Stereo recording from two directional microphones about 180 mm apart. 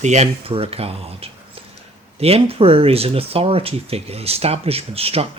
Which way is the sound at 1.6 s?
35° right (ahead or behind).